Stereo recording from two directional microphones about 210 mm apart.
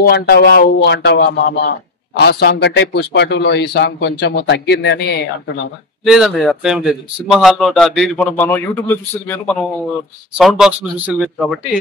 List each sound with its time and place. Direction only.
0.0 s a man's voice: 50° left (ahead or behind)
6.0 s a man's voice: centre (ahead or behind)
10.3 s a man's voice: 5° right (ahead or behind)